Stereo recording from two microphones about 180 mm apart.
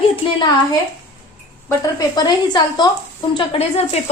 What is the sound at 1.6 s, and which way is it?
Speech, 20° left (ahead or behind).